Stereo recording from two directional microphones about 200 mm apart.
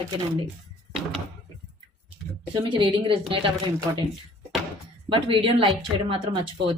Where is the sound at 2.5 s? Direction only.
25° right (ahead or behind).